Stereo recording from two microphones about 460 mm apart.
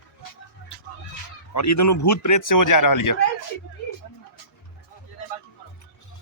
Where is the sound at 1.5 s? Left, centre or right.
Left.